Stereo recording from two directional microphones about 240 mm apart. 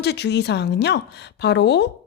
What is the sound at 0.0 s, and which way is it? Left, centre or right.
A woman's voice, left.